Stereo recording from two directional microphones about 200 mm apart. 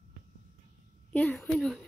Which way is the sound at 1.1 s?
5° left (ahead or behind).